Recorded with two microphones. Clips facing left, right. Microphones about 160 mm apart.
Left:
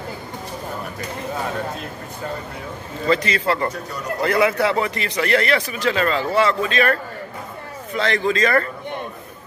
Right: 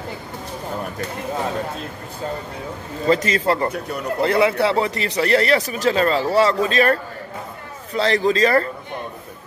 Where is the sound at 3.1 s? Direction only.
40° right (ahead or behind).